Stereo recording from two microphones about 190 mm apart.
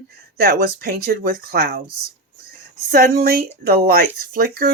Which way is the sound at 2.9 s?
50° right (ahead or behind).